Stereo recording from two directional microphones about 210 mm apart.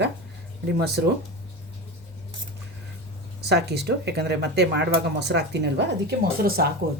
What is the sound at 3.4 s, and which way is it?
Speech, 50° right (ahead or behind).